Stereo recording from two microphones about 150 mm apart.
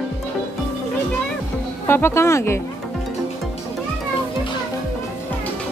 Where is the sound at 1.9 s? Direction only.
15° left (ahead or behind).